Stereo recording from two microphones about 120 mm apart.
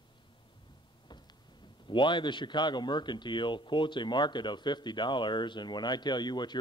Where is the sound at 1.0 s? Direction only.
40° left (ahead or behind).